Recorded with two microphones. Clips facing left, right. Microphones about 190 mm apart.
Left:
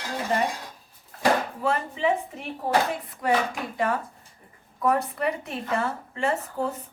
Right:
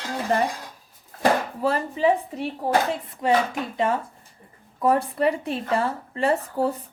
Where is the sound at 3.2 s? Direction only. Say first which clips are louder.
Right 3 dB; 25° right (ahead or behind).